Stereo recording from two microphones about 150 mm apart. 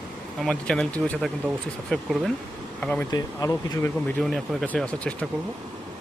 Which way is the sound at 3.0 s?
25° left (ahead or behind).